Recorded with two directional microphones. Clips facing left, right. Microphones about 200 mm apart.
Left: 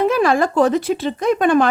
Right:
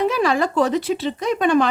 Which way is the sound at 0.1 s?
50° left (ahead or behind).